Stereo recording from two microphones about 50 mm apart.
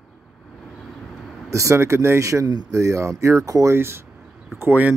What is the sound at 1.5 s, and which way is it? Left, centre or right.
Speech, right.